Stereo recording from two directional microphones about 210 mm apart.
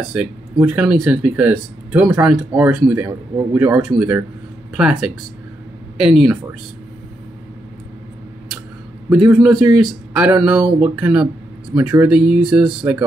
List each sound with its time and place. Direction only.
0.1 s speech: 5° right (ahead or behind)
9.1 s speech: 5° right (ahead or behind)